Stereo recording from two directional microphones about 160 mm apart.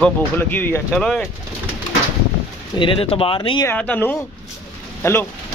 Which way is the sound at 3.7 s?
10° left (ahead or behind).